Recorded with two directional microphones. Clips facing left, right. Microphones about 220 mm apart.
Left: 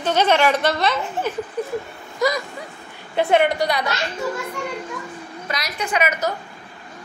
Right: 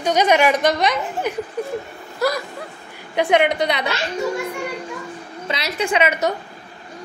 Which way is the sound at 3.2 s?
15° right (ahead or behind).